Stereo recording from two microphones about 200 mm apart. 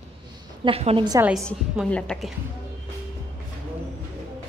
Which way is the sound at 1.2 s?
Centre (ahead or behind).